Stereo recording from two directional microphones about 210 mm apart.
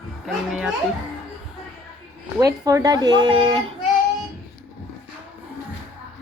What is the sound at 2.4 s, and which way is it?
Speech, 15° right (ahead or behind).